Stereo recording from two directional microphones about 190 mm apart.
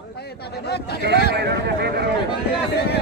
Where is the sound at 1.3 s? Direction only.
60° right (ahead or behind).